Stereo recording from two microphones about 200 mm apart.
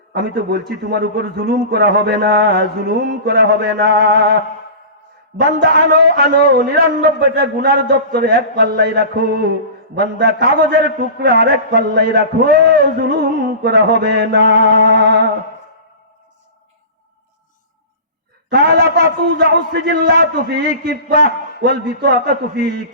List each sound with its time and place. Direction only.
0.1 s a man's voice: 55° right (ahead or behind)
5.4 s a man's voice: 55° right (ahead or behind)
18.4 s a man's voice: 55° right (ahead or behind)